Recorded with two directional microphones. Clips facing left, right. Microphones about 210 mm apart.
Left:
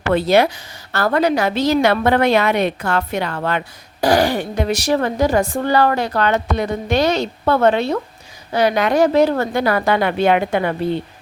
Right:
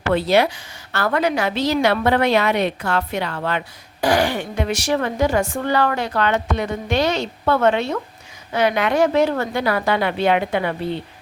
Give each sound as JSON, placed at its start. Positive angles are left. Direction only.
{"t": 0.1, "sound": "a woman's voice", "side_deg": 45}
{"t": 4.0, "sound": "a woman's voice", "side_deg": 35}